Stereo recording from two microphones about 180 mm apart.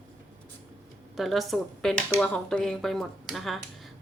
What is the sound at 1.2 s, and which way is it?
Speech, centre (ahead or behind).